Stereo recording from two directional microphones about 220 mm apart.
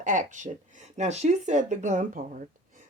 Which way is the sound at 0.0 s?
35° right (ahead or behind).